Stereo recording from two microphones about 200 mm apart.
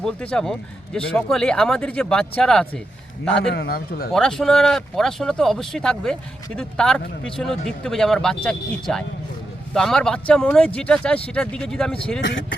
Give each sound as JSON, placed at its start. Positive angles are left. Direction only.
{"t": 0.0, "sound": "speech", "side_deg": 5}
{"t": 3.5, "sound": "a man's voice", "side_deg": 50}
{"t": 4.1, "sound": "speech", "side_deg": 0}
{"t": 12.2, "sound": "speech", "side_deg": 65}